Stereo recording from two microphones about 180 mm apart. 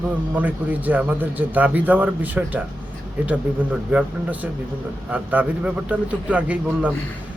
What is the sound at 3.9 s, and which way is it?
A man's voice, 10° right (ahead or behind).